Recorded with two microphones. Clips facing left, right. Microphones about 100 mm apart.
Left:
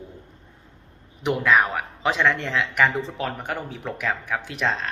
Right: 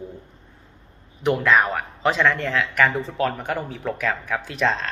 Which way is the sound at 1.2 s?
10° left (ahead or behind).